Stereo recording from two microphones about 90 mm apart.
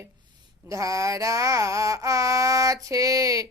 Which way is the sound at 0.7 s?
40° right (ahead or behind).